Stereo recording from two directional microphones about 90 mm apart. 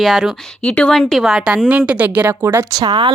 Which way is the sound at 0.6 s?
10° left (ahead or behind).